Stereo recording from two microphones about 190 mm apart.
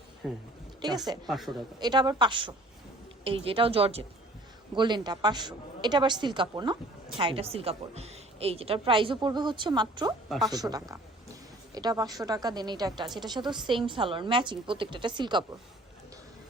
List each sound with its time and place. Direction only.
0.2 s a man's voice: 5° right (ahead or behind)
0.8 s a woman's voice: 20° right (ahead or behind)
10.2 s speech: centre (ahead or behind)
10.5 s a woman's voice: 20° right (ahead or behind)